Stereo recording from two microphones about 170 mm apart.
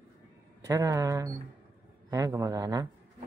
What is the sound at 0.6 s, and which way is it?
A man's voice, 20° right (ahead or behind).